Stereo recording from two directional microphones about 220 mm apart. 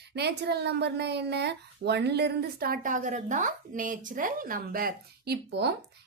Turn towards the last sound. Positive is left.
turn(degrees=-50)  # may be behind; listen again after turning